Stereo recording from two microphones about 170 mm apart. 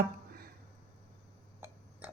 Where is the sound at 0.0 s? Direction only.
65° right (ahead or behind).